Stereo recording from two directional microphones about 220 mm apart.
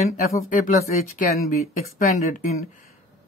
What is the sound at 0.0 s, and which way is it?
Speech, 35° left (ahead or behind).